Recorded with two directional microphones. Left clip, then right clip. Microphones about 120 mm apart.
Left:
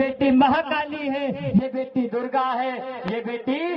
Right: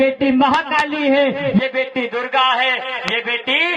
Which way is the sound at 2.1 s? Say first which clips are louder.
Right 8 dB; 15° right (ahead or behind).